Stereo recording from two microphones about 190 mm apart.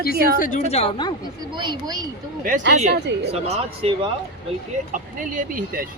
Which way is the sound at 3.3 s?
35° right (ahead or behind).